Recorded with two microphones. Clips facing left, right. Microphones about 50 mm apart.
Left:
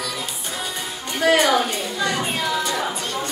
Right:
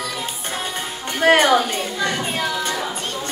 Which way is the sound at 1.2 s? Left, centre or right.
Right.